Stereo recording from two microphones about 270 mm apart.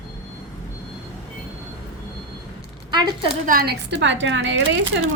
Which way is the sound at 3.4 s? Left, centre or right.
Right.